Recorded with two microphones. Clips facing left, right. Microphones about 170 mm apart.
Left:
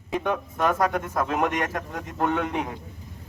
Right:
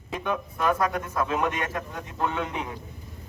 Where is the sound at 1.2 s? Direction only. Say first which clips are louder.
Left 1 dB; 60° left (ahead or behind).